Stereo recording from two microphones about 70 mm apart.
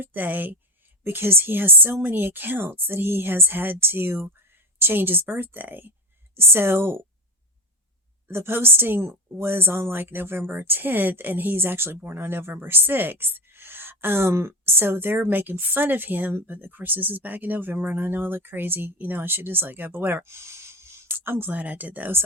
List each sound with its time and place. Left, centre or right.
0.0 s speech: right
8.3 s speech: right